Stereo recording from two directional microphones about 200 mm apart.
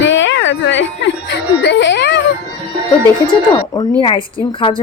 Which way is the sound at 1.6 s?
65° left (ahead or behind).